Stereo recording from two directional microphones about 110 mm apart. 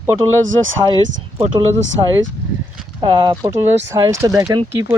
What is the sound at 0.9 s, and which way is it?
Speech, 45° right (ahead or behind).